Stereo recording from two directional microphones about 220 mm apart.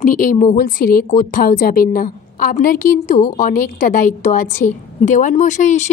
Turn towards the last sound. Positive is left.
turn(degrees=35)  # may be behind; listen again after turning